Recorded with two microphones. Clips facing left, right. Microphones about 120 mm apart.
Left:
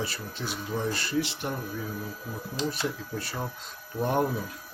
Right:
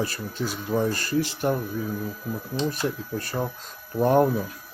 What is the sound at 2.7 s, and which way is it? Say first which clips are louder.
Speech: right 4 dB; 45° right (ahead or behind).